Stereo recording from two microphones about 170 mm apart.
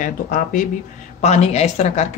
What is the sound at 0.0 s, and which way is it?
Speech, 50° left (ahead or behind).